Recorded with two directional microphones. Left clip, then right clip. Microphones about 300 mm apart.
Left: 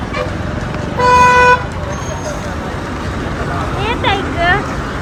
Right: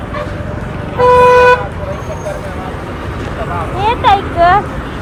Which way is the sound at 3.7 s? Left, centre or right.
Centre.